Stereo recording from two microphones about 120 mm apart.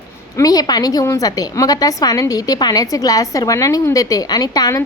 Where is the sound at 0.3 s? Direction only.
30° left (ahead or behind).